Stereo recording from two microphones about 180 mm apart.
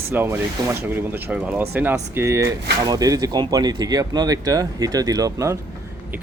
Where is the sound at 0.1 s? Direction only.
10° right (ahead or behind).